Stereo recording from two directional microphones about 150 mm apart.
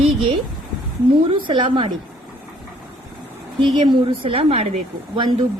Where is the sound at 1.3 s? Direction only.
35° right (ahead or behind).